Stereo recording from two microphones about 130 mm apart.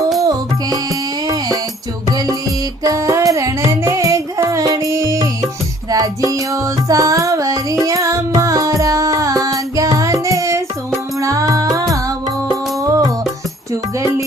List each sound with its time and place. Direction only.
0.2 s music: 30° right (ahead or behind)
2.8 s music: 25° right (ahead or behind)